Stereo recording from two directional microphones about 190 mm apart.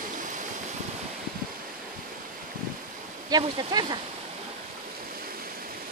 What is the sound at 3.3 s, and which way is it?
Speech, 20° right (ahead or behind).